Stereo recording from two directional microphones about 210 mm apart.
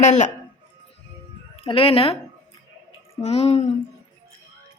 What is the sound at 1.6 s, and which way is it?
A child's voice, 25° left (ahead or behind).